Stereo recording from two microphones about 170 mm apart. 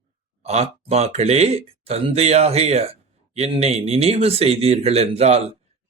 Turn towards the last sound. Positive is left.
turn(degrees=-40)  # may be behind; listen again after turning